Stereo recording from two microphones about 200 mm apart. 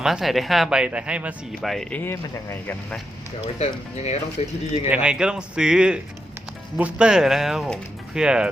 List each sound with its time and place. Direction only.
0.0 s speech: centre (ahead or behind)
3.4 s speech: 30° left (ahead or behind)
4.9 s speech: 5° right (ahead or behind)